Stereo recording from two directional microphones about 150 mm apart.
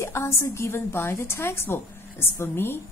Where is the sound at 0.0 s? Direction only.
20° left (ahead or behind).